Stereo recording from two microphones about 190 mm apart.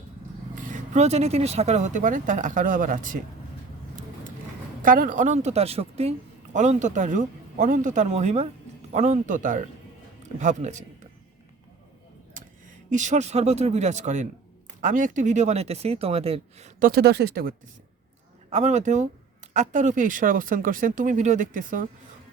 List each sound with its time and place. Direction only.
0.5 s speech: 45° right (ahead or behind)
4.8 s a woman's voice: 45° right (ahead or behind)
12.9 s a woman's voice: 40° right (ahead or behind)
16.9 s speech: 60° right (ahead or behind)
18.5 s a woman's voice: 40° right (ahead or behind)